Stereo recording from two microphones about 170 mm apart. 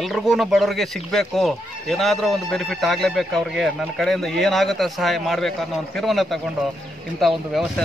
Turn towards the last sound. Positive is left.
turn(degrees=0)  # may be behind; listen again after turning